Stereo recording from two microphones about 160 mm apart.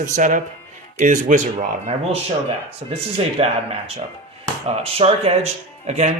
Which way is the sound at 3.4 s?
40° right (ahead or behind).